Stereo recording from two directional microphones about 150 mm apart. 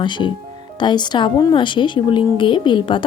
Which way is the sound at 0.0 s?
30° left (ahead or behind).